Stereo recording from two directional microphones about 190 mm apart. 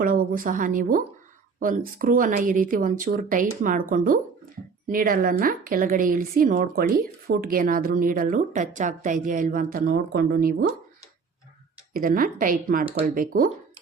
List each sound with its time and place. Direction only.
0.0 s a woman's voice: 45° right (ahead or behind)
11.9 s a woman's voice: 50° right (ahead or behind)